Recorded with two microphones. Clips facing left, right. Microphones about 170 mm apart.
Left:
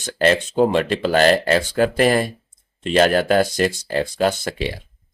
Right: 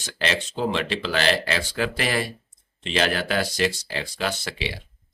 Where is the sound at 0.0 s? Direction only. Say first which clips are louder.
Left 9 dB; 50° left (ahead or behind).